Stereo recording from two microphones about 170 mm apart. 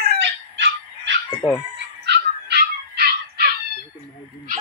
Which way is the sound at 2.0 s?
80° right.